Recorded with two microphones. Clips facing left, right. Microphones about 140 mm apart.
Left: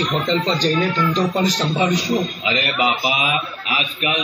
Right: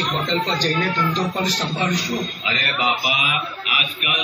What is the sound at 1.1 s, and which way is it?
A man's voice, 15° left (ahead or behind).